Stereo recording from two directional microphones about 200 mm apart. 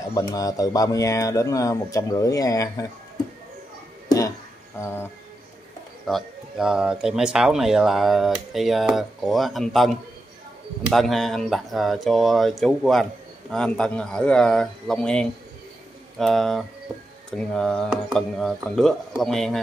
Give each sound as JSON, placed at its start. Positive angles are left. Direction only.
{"t": 0.1, "sound": "speech", "side_deg": 20}
{"t": 4.7, "sound": "music", "side_deg": 15}
{"t": 6.0, "sound": "speech", "side_deg": 0}